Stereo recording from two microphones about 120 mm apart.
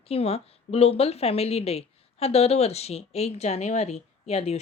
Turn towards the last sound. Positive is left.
turn(degrees=60)  # may be behind; listen again after turning